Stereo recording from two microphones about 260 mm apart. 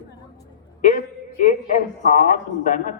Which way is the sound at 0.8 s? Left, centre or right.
Left.